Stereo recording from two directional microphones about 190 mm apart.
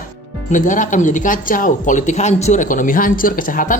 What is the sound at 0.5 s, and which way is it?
Speech, 40° left (ahead or behind).